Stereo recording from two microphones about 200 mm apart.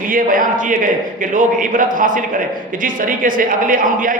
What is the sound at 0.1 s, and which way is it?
A man's voice, 45° right (ahead or behind).